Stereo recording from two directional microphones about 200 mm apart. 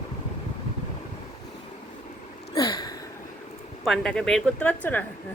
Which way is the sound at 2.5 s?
20° left (ahead or behind).